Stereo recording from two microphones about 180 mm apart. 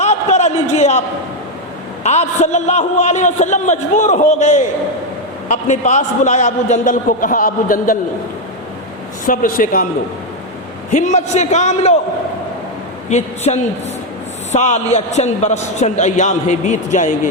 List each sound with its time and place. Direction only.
0.0 s a sound: 40° left (ahead or behind)
2.0 s a man's voice: 40° left (ahead or behind)
9.2 s a man's voice: 50° left (ahead or behind)
10.9 s a man's voice: 40° left (ahead or behind)
13.1 s a man's voice: 40° left (ahead or behind)